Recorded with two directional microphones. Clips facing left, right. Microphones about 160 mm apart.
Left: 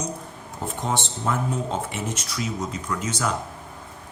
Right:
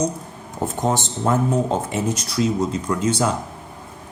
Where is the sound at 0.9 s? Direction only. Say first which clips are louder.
Right 6 dB; 40° right (ahead or behind).